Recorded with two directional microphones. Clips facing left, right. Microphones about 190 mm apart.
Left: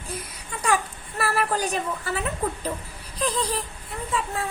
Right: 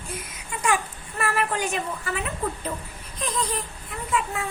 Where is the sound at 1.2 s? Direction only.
35° left (ahead or behind).